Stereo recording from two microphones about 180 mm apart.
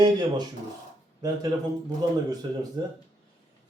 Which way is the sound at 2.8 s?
20° right (ahead or behind).